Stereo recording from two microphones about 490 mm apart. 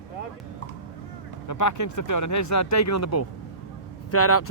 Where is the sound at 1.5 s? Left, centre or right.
Left.